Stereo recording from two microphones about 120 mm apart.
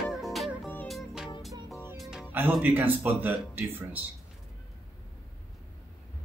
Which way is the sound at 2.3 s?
15° right (ahead or behind).